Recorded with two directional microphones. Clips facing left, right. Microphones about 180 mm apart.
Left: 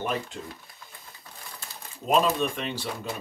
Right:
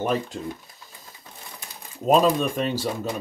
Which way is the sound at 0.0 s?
35° right (ahead or behind).